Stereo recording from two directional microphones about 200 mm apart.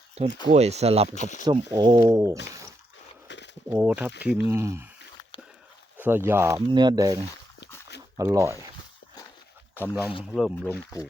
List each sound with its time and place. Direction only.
0.2 s speech: 30° right (ahead or behind)
1.1 s speech: 35° left (ahead or behind)
1.5 s speech: 20° right (ahead or behind)
3.2 s a sound: 65° left (ahead or behind)
3.7 s speech: 10° right (ahead or behind)
6.0 s speech: 10° right (ahead or behind)
9.9 s speech: 5° right (ahead or behind)